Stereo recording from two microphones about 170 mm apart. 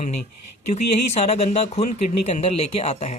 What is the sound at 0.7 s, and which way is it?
Speech, 40° left (ahead or behind).